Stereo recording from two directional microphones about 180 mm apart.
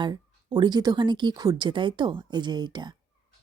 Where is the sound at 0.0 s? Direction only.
25° right (ahead or behind).